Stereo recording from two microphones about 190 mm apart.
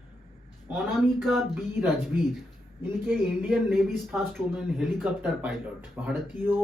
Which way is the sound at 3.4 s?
Centre (ahead or behind).